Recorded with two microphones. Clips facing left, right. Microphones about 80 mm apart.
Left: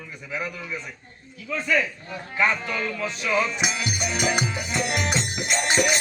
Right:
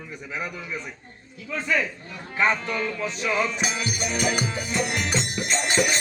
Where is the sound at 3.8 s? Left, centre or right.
Centre.